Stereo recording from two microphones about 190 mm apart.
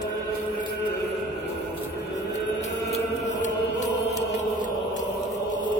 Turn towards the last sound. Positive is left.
turn(degrees=40)  # may be behind; listen again after turning